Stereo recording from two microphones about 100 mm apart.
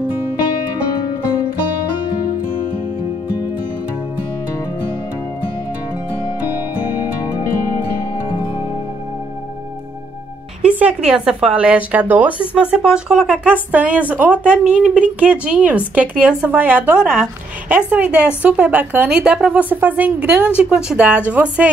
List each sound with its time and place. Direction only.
10.6 s a woman's voice: 10° right (ahead or behind)